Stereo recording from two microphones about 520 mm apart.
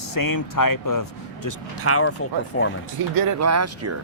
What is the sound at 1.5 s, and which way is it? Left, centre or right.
Speech, left.